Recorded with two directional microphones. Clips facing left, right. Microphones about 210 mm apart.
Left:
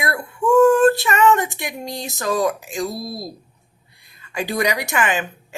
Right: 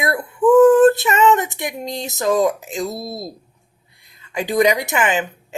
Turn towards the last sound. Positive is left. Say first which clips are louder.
# right 2 dB
turn(degrees=-20)  # may be behind; listen again after turning